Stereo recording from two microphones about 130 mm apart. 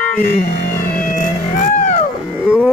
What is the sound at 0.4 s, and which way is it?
Music, 90° left.